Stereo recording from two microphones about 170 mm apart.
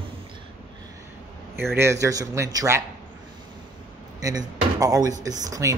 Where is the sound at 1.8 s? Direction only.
15° right (ahead or behind).